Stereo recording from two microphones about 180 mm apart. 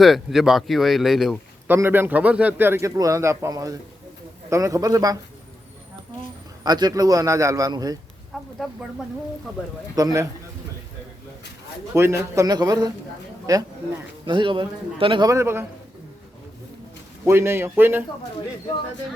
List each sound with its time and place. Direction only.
0.0 s a man's voice: centre (ahead or behind); by 5.1 s 20° right (ahead or behind)
6.7 s a man's voice: 20° right (ahead or behind)
8.6 s speech: centre (ahead or behind)
9.9 s a man's voice: 20° right (ahead or behind)
11.9 s a man's voice: 15° right (ahead or behind)
17.2 s a man's voice: 15° right (ahead or behind)